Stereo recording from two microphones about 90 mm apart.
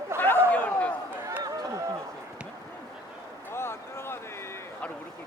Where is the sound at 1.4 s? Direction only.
40° right (ahead or behind).